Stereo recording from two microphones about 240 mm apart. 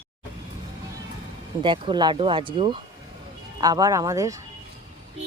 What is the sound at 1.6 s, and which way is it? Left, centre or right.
Speech, centre.